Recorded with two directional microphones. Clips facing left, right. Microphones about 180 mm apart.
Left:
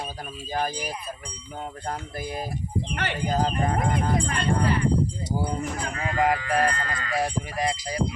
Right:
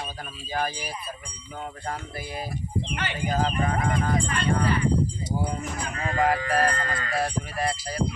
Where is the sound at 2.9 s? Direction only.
60° left (ahead or behind).